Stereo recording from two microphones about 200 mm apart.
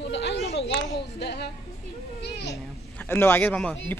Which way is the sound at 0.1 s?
60° left (ahead or behind).